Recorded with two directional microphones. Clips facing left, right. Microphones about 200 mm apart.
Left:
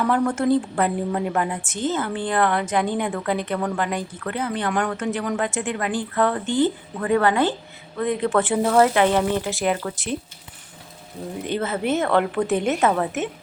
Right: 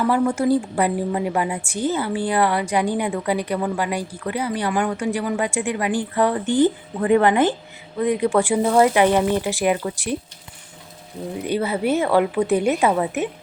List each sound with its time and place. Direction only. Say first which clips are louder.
0.0 s a woman's voice: right 2 dB; 10° right (ahead or behind)
11.4 s a woman's voice: right 3 dB; 10° right (ahead or behind)